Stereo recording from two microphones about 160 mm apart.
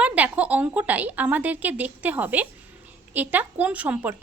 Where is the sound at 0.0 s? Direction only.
10° right (ahead or behind).